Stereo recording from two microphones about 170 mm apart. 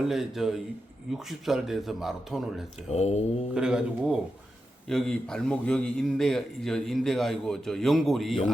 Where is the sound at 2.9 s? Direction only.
40° left (ahead or behind).